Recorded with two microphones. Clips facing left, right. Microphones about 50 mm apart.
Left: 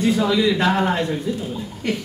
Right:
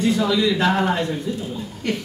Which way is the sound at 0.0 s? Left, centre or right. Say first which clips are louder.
Left 1 dB; centre.